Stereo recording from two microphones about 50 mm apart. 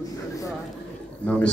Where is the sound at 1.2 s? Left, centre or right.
Left.